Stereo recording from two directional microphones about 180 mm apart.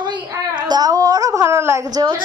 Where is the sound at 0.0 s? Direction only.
25° right (ahead or behind).